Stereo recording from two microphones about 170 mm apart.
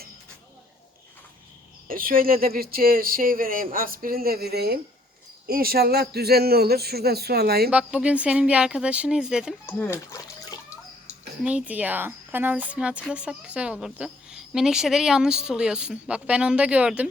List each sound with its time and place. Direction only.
1.9 s a man's voice: 55° right (ahead or behind)
7.7 s speech: 5° right (ahead or behind)
9.6 s speech: 15° left (ahead or behind)
11.4 s speech: 10° right (ahead or behind)